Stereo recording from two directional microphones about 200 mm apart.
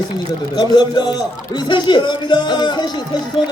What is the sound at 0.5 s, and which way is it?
Speech, 20° left (ahead or behind).